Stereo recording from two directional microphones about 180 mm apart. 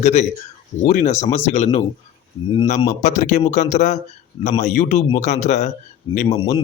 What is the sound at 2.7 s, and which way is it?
Speech, 45° left (ahead or behind).